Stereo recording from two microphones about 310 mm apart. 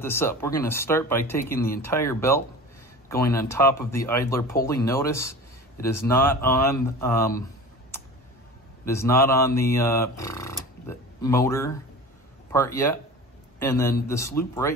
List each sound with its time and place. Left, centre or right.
0.0 s speech: centre
8.8 s a sound: centre
12.5 s speech: centre